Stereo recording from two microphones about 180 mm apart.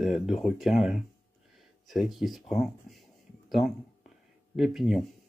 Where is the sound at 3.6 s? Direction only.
40° left (ahead or behind).